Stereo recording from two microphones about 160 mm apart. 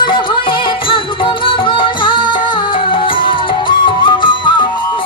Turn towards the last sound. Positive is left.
turn(degrees=30)  # may be behind; listen again after turning